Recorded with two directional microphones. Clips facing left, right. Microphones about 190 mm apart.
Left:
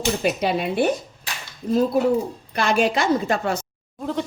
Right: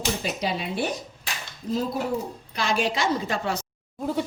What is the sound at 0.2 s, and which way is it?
Speech, 60° left (ahead or behind).